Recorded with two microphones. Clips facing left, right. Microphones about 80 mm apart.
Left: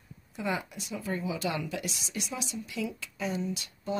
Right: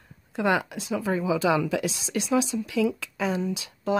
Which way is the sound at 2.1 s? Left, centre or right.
Right.